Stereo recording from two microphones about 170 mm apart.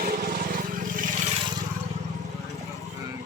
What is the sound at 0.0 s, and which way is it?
Vehicle, 60° right (ahead or behind).